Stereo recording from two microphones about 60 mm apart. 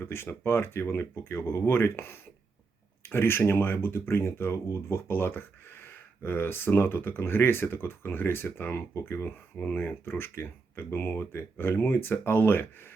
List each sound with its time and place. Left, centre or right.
0.0 s speech: left